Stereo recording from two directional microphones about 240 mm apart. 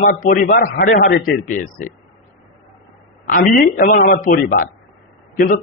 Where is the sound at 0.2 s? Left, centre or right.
Left.